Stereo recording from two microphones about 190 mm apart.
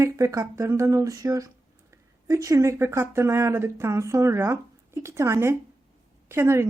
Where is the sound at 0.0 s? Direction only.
15° right (ahead or behind).